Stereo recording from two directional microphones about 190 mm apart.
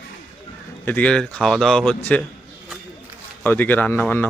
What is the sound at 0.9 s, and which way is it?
Speech, 5° left (ahead or behind).